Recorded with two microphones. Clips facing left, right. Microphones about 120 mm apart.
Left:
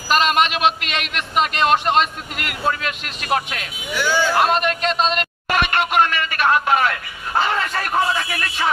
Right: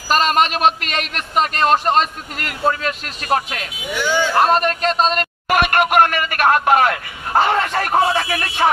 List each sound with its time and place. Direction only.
0.1 s a man's voice: 40° right (ahead or behind)
4.0 s speech: 20° right (ahead or behind)
4.4 s a man's voice: 40° right (ahead or behind); by 8.6 s 55° right (ahead or behind)